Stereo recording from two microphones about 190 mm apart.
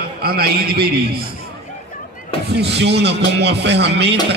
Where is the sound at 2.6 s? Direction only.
60° right (ahead or behind).